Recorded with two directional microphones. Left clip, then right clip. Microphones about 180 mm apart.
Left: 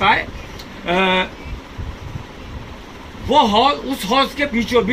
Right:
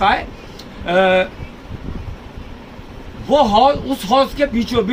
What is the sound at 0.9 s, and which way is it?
Speech, 15° right (ahead or behind).